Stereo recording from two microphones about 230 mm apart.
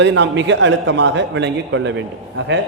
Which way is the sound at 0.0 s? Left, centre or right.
Right.